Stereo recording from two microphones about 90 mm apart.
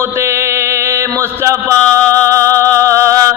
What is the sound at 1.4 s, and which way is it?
Music, 30° right (ahead or behind).